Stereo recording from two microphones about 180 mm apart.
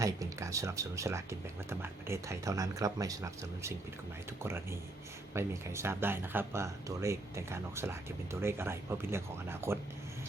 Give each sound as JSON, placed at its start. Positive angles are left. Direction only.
{"t": 0.0, "sound": "speech", "side_deg": -15}